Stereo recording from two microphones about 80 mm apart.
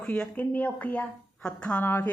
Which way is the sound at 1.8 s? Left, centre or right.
Left.